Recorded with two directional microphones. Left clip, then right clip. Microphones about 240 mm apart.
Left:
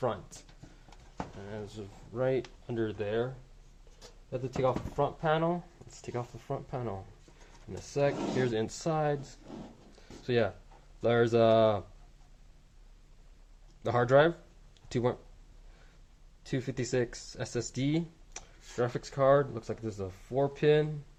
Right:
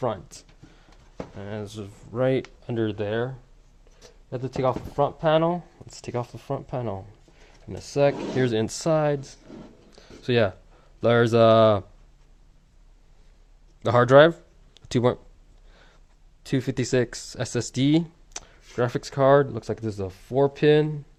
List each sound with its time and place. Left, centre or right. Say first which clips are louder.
0.0 s speech: right 5 dB; right
1.4 s speech: right 7 dB; right
4.3 s speech: right 5 dB; right
9.9 s a sound: right 7 dB; right
11.0 s speech: right 7 dB; right
13.8 s speech: right 9 dB; right
16.4 s speech: right 8 dB; right